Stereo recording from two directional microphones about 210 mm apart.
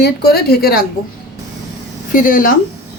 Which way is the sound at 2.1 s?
40° left (ahead or behind).